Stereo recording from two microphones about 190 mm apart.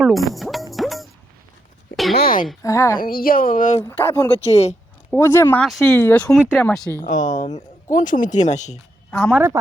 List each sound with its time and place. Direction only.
0.0 s music: centre (ahead or behind)
2.1 s a sound: 50° left (ahead or behind)
2.6 s speech: 15° left (ahead or behind)
3.0 s speech: 50° left (ahead or behind)
3.8 s speech: 10° left (ahead or behind)
7.0 s speech: 40° left (ahead or behind)
9.0 s a woman's voice: 5° left (ahead or behind)
9.3 s speech: 15° right (ahead or behind)